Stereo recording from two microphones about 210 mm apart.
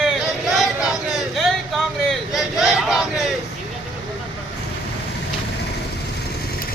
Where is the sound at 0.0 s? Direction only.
Centre (ahead or behind).